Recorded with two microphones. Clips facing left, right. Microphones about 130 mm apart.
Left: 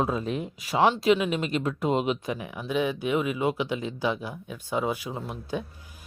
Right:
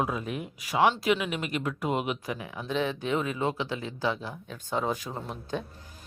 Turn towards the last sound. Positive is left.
turn(degrees=10)  # may be behind; listen again after turning